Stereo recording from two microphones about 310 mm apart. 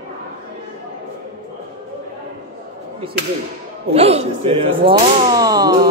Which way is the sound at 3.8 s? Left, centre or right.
Centre.